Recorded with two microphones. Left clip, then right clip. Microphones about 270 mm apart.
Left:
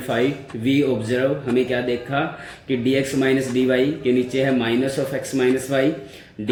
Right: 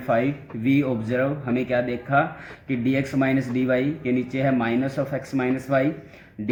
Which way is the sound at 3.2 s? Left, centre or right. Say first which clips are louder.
Left 4 dB; right.